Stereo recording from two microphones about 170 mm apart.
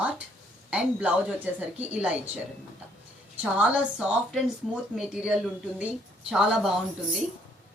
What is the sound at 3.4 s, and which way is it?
Speech, 5° right (ahead or behind).